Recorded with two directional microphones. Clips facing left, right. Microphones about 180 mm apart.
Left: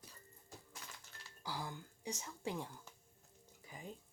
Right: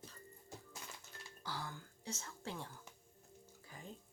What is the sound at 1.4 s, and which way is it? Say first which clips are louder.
Speech: left 2 dB; 15° left (ahead or behind).